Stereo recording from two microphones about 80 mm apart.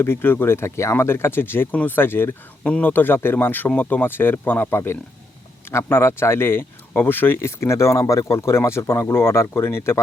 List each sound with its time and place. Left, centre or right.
0.0 s speech: left